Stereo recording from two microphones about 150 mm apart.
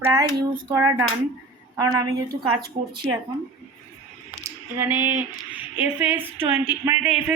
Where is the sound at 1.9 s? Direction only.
25° right (ahead or behind).